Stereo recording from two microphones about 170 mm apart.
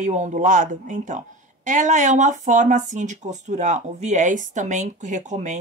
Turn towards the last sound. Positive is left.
turn(degrees=-45)  # may be behind; listen again after turning